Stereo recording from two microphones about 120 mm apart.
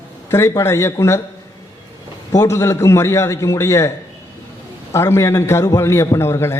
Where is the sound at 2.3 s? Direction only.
25° left (ahead or behind).